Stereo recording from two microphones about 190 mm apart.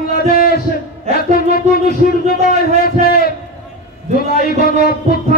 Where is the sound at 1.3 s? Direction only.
50° left (ahead or behind).